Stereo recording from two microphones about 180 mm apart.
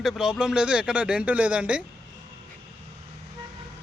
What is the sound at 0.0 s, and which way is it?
Speech, centre (ahead or behind).